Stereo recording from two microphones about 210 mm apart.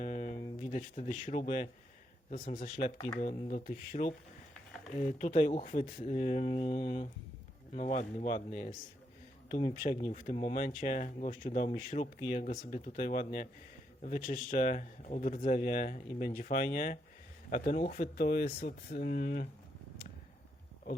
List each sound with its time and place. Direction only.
0.0 s a sound: 35° left (ahead or behind)
0.6 s speech: 30° left (ahead or behind)
10.3 s speech: 25° left (ahead or behind)
10.6 s speech: 40° left (ahead or behind)